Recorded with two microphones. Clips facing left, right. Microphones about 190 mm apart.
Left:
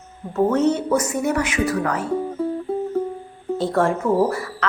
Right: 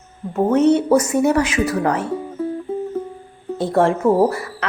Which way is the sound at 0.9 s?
30° right (ahead or behind).